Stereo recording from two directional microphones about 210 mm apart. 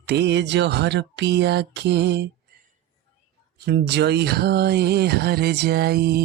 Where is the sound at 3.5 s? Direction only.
50° right (ahead or behind).